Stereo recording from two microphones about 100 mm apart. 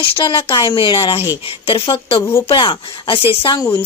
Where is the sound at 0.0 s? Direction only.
60° left (ahead or behind).